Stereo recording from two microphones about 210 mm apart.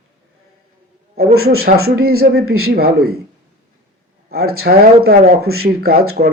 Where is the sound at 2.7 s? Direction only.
45° right (ahead or behind).